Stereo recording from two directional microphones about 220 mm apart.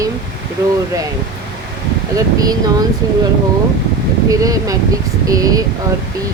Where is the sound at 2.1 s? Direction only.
15° right (ahead or behind).